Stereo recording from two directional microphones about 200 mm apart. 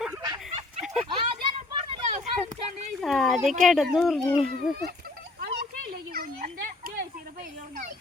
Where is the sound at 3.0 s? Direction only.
Centre (ahead or behind).